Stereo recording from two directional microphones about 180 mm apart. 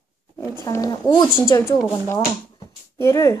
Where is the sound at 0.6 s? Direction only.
20° left (ahead or behind).